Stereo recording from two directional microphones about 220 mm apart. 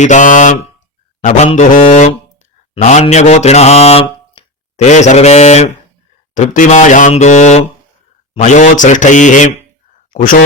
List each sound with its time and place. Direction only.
0.0 s speech: 35° left (ahead or behind)
2.7 s mantra: 30° left (ahead or behind)
6.3 s speech: 35° left (ahead or behind)